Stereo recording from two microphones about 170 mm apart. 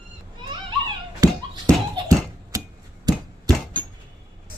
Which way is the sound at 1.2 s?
20° right (ahead or behind).